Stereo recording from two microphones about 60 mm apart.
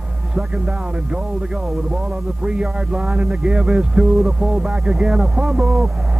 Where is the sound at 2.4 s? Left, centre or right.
Centre.